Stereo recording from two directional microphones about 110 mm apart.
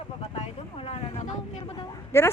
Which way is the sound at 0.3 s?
70° left (ahead or behind).